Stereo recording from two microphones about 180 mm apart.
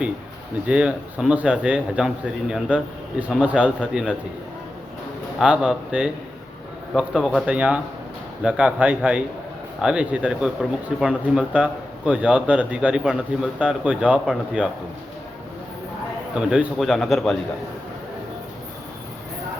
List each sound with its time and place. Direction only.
0.7 s speech: 5° right (ahead or behind)
5.4 s speech: 5° right (ahead or behind)
16.5 s speech: 5° right (ahead or behind)